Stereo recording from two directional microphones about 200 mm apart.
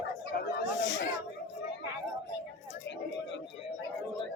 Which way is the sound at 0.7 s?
60° left (ahead or behind).